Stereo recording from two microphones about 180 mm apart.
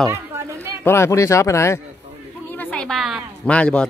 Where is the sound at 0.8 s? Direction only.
15° left (ahead or behind).